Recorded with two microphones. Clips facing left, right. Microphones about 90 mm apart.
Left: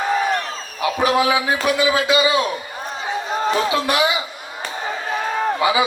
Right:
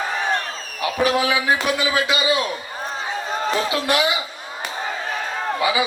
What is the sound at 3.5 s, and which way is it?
Speech, 25° left (ahead or behind).